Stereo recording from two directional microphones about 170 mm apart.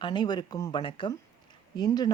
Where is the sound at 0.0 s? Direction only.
25° left (ahead or behind).